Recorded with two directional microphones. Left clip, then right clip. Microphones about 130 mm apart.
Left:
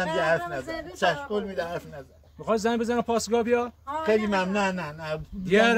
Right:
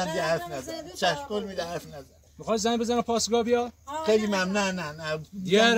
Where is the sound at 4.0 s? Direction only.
15° left (ahead or behind).